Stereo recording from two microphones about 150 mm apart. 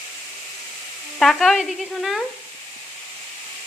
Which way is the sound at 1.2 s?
Centre (ahead or behind).